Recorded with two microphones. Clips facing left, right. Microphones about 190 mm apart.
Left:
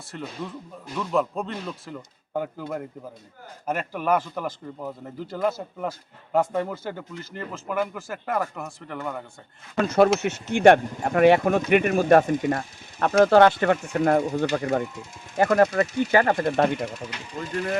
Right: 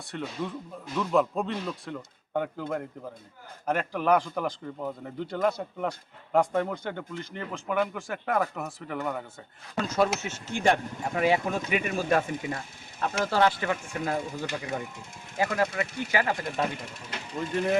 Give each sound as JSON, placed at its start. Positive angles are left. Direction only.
{"t": 0.1, "sound": "a man's voice", "side_deg": 0}
{"t": 9.7, "sound": "speech", "side_deg": 60}